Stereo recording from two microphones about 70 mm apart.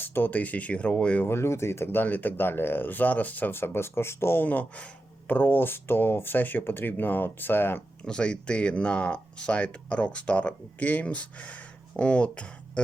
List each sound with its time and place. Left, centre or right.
0.0 s speech: left
1.3 s speech: left
8.0 s speech: centre